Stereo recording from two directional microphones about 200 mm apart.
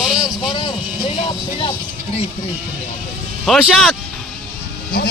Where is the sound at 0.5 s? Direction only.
20° left (ahead or behind).